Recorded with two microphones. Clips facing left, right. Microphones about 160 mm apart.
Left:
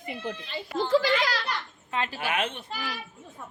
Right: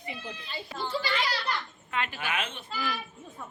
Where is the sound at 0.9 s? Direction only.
90° left.